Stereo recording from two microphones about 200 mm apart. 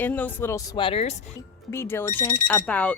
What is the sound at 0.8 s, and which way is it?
Speech, 30° left (ahead or behind).